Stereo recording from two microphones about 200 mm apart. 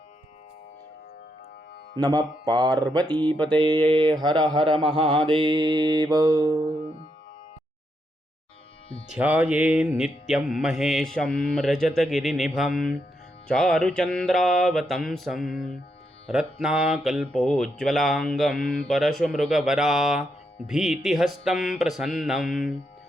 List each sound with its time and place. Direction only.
2.0 s mantra: 20° right (ahead or behind)
3.2 s music: 5° left (ahead or behind)
3.5 s mantra: 25° right (ahead or behind)
9.0 s mantra: 10° right (ahead or behind)